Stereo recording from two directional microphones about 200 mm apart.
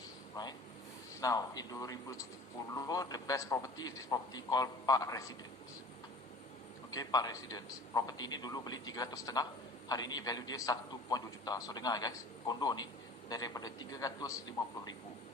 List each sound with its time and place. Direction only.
0.4 s a man's voice: 20° left (ahead or behind)
6.9 s a man's voice: 20° left (ahead or behind)